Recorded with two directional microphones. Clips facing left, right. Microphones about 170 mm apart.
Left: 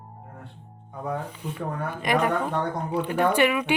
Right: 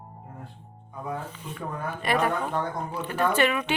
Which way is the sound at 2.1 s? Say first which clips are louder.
Left 2 dB; 15° left (ahead or behind).